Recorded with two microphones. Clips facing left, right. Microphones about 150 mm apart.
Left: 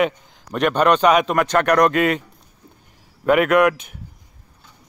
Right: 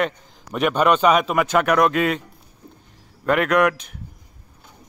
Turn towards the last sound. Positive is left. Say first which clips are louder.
# left 2 dB
turn(degrees=0)  # may be behind; listen again after turning